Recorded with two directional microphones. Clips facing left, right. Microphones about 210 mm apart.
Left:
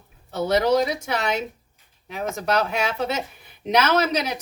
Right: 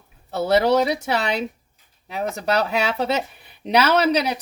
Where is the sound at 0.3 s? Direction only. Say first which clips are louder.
Right 2 dB; 35° right (ahead or behind).